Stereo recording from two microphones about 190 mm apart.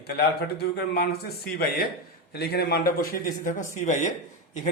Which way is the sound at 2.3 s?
55° left (ahead or behind).